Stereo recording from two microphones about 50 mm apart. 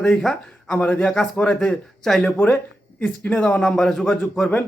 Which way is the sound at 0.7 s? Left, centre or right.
Left.